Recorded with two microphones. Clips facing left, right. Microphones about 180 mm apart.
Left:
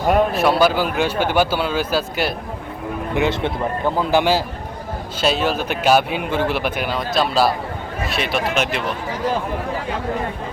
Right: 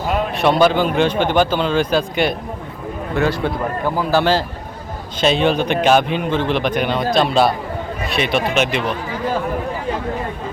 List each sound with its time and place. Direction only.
0.3 s speech: 5° left (ahead or behind)
3.2 s a man's voice: 20° left (ahead or behind); by 8.8 s centre (ahead or behind)